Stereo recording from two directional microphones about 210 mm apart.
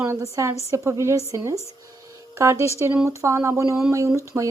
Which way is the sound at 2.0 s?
15° right (ahead or behind).